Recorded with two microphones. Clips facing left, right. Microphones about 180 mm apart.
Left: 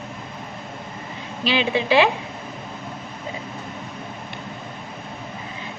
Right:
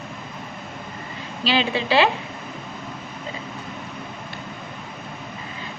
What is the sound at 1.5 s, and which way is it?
Speech, 15° left (ahead or behind).